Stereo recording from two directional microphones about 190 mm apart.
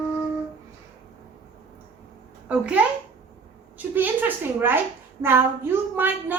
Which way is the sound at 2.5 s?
5° right (ahead or behind).